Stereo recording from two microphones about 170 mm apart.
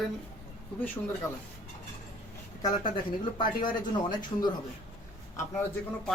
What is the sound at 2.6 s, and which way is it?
Speech, 25° left (ahead or behind).